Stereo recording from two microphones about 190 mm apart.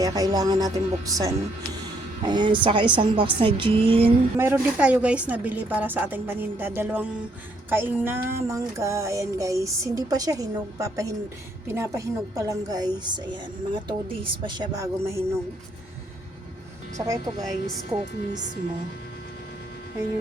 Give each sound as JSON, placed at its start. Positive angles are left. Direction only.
{"t": 0.0, "sound": "a woman's voice", "side_deg": -20}
{"t": 4.4, "sound": "music", "side_deg": -10}
{"t": 11.7, "sound": "a woman's voice", "side_deg": -15}
{"t": 17.0, "sound": "a woman's voice", "side_deg": -20}